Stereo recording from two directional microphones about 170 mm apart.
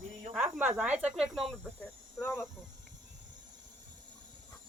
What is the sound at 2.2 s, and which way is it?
Speech, 15° left (ahead or behind).